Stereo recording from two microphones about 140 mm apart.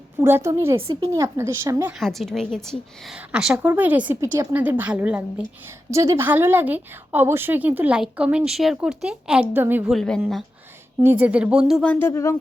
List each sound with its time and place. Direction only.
0.2 s a woman's voice: 15° right (ahead or behind)
0.8 s speech: 40° right (ahead or behind)
1.1 s a woman's voice: 20° right (ahead or behind)
1.9 s a woman's voice: centre (ahead or behind)
5.9 s a woman's voice: 20° right (ahead or behind)
9.9 s a woman's voice: 5° left (ahead or behind)
11.0 s a woman's voice: 10° right (ahead or behind)
11.8 s speech: 10° left (ahead or behind)